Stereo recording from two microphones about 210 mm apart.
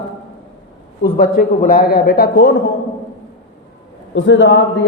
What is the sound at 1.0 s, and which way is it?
A man's voice, 45° left (ahead or behind).